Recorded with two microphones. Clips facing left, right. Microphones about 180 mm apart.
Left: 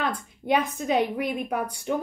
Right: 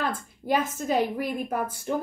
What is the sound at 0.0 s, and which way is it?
A woman's voice, centre (ahead or behind).